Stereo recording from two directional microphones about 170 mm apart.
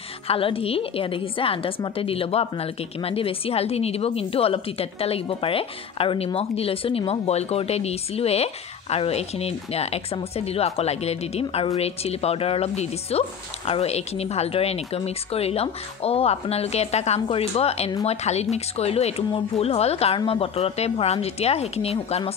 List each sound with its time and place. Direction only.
0.3 s a woman's voice: 35° left (ahead or behind)